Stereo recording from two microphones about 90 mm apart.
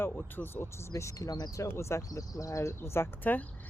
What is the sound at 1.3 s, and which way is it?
Speech, 50° left (ahead or behind).